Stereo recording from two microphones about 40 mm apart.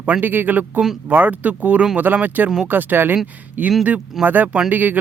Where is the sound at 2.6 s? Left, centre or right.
Right.